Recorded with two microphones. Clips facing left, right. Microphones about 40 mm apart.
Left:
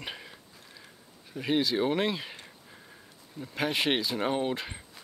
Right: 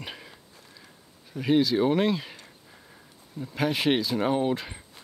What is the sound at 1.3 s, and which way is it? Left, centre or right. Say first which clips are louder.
Speech: right 5 dB; centre.